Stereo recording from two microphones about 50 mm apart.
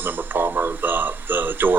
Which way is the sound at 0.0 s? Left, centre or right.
Right.